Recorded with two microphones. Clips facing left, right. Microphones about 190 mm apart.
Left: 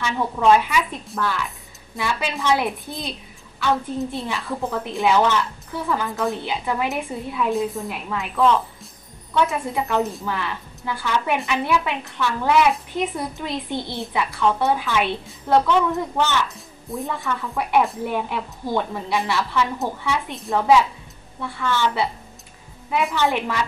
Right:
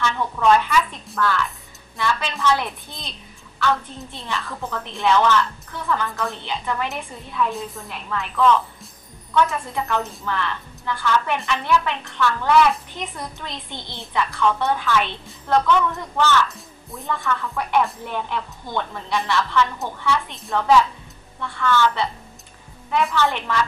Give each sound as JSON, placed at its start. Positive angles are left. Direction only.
{"t": 0.5, "sound": "a woman's voice", "side_deg": 10}
{"t": 10.0, "sound": "a woman's voice", "side_deg": 5}
{"t": 16.9, "sound": "a woman's voice", "side_deg": 0}
{"t": 17.2, "sound": "a woman's voice", "side_deg": 15}